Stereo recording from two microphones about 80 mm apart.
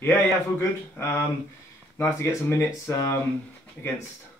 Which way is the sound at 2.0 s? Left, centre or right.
Left.